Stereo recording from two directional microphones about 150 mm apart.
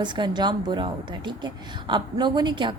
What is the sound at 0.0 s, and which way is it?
A woman's voice, 30° right (ahead or behind).